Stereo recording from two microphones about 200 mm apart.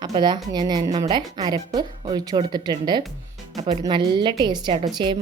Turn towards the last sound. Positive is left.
turn(degrees=-25)  # may be behind; listen again after turning